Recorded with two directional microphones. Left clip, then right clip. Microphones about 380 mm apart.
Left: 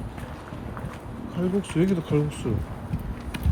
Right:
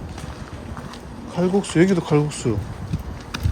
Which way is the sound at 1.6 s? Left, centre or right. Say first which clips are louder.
Right 7 dB; centre.